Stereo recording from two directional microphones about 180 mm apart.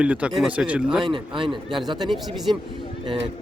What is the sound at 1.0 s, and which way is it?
Speech, 25° right (ahead or behind).